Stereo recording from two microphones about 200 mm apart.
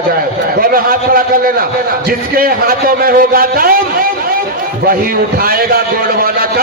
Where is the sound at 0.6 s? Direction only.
45° right (ahead or behind).